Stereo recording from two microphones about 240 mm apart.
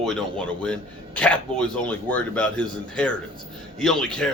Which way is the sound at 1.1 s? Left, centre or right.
Centre.